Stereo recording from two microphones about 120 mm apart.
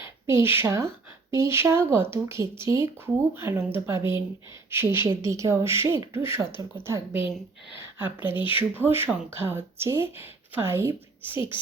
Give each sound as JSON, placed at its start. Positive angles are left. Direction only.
{"t": 0.3, "sound": "a woman's voice", "side_deg": -20}